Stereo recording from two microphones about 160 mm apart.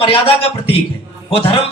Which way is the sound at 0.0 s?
35° left (ahead or behind).